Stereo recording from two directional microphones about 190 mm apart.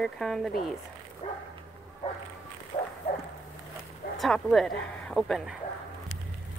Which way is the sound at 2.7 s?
40° left (ahead or behind).